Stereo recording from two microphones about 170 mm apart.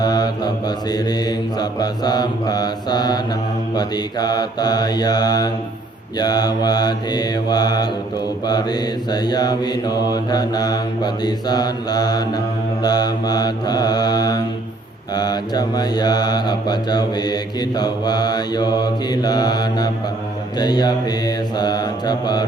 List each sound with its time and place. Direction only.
0.0 s mantra: 25° left (ahead or behind)